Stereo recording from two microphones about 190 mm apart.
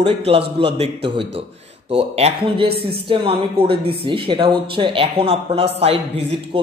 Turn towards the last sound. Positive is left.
turn(degrees=-30)  # may be behind; listen again after turning